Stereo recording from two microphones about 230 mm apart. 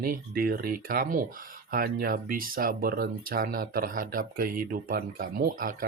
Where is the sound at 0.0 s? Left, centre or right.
Right.